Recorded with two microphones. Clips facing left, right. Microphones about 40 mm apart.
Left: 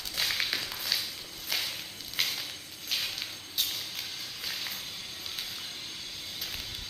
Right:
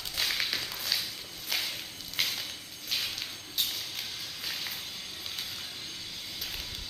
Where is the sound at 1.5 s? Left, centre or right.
Centre.